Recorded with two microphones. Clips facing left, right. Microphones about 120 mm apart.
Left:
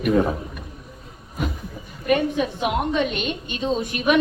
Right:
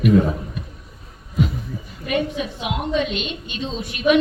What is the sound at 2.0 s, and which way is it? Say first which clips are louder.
Speech: left 3 dB; 50° left (ahead or behind).